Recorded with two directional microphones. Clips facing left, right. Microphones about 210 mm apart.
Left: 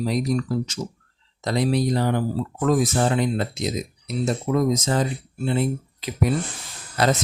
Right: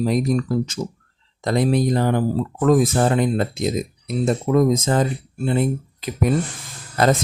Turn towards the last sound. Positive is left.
turn(degrees=-50)  # may be behind; listen again after turning